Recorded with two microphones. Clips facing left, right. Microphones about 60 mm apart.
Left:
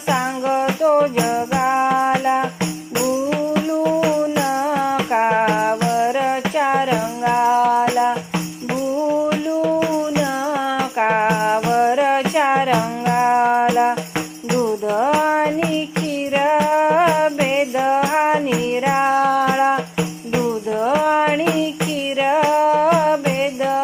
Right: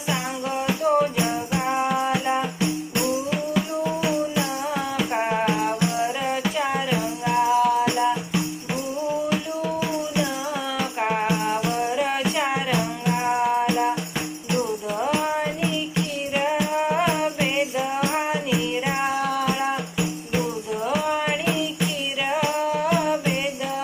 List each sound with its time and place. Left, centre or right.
0.1 s jingle bell: left
1.3 s music: left
4.0 s music: left
9.6 s music: left
11.0 s music: left
14.9 s music: left
17.6 s jingle bell: left
18.9 s music: left
20.8 s music: left